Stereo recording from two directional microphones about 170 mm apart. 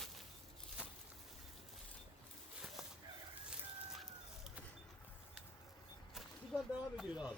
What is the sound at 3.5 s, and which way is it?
Chicken, centre (ahead or behind).